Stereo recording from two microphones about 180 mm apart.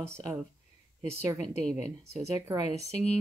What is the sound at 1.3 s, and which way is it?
Speech, 5° left (ahead or behind).